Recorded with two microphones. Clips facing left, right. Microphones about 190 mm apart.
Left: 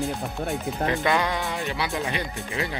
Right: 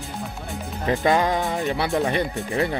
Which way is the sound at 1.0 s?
45° right (ahead or behind).